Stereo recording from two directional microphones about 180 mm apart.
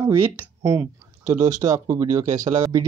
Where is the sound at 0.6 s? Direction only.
15° right (ahead or behind).